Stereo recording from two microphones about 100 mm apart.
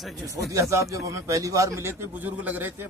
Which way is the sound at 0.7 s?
30° right (ahead or behind).